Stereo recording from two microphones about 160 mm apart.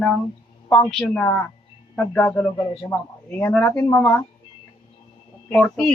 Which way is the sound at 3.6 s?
15° left (ahead or behind).